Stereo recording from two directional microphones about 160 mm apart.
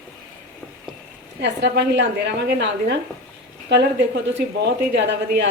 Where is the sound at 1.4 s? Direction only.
90° right.